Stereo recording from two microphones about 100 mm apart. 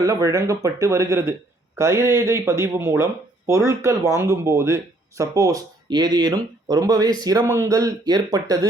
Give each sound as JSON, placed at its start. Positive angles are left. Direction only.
{"t": 0.0, "sound": "speech", "side_deg": -30}
{"t": 7.4, "sound": "speech", "side_deg": -25}